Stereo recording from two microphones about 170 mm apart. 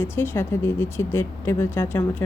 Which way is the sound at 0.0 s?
15° left (ahead or behind).